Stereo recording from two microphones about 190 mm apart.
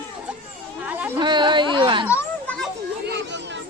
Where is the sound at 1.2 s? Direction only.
25° right (ahead or behind).